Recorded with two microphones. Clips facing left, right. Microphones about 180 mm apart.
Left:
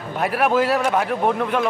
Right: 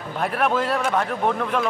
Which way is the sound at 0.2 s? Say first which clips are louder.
Left 3 dB; 5° left (ahead or behind).